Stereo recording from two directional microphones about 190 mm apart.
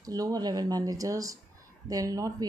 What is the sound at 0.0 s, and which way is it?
Speech, 20° right (ahead or behind).